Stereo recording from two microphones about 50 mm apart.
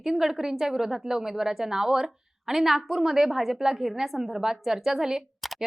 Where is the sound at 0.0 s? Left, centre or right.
Centre.